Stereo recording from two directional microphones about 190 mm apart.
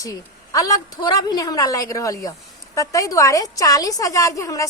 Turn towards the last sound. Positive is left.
turn(degrees=15)  # may be behind; listen again after turning